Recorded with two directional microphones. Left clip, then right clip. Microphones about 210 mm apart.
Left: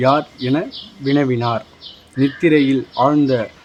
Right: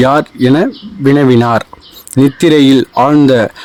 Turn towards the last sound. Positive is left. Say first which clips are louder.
# right 7 dB
turn(degrees=-45)  # may be behind; listen again after turning